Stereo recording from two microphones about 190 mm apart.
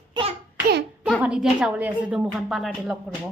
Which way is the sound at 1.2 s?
5° right (ahead or behind).